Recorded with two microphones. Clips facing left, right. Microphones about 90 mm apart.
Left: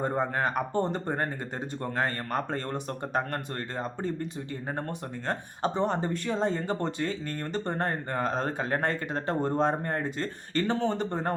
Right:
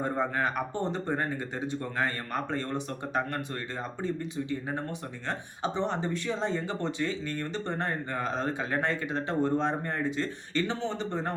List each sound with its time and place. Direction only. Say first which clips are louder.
0.0 s speech: left 1 dB; 40° left (ahead or behind)
5.3 s speech: left 2 dB; 45° left (ahead or behind)